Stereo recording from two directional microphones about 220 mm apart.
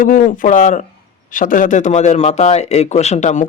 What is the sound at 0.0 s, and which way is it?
A man's voice, 35° left (ahead or behind).